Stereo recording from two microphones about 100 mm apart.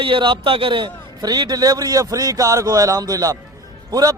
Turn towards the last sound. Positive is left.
turn(degrees=-40)  # may be behind; listen again after turning